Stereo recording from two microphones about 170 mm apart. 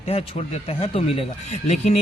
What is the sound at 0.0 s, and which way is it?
Speech, 35° left (ahead or behind).